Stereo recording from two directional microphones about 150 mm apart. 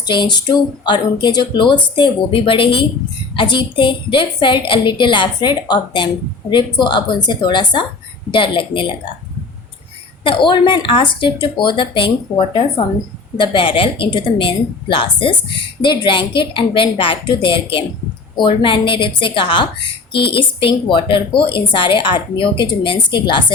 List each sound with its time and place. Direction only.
0.0 s a woman's voice: 30° left (ahead or behind)
10.2 s a woman's voice: 35° left (ahead or behind)
13.3 s a woman's voice: 35° left (ahead or behind)